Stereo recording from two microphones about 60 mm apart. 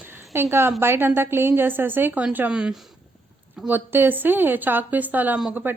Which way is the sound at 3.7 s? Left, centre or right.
Right.